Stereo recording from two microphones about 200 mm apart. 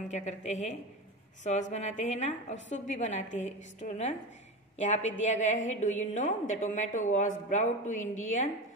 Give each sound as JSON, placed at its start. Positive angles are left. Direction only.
{"t": 0.1, "sound": "a woman's voice", "side_deg": 35}